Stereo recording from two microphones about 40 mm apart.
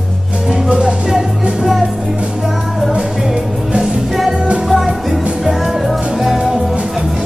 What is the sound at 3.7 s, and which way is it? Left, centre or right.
Music, right.